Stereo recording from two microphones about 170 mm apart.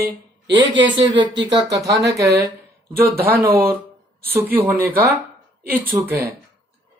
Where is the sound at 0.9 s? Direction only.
30° right (ahead or behind).